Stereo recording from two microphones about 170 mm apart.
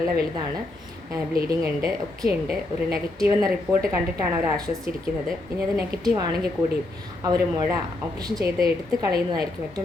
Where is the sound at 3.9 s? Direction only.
15° right (ahead or behind).